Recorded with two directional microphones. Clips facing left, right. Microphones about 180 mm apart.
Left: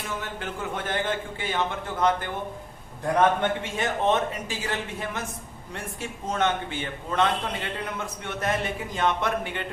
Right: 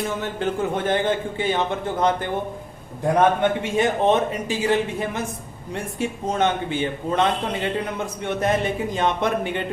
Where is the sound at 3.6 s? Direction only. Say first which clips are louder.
Right 7 dB; 15° right (ahead or behind).